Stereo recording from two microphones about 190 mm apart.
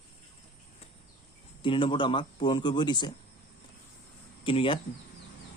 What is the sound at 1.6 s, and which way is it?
Speech, 25° left (ahead or behind).